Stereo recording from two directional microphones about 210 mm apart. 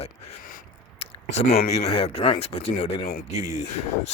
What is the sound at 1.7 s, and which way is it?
Speech, 30° left (ahead or behind).